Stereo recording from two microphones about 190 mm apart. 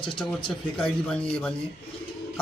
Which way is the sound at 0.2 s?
Centre (ahead or behind).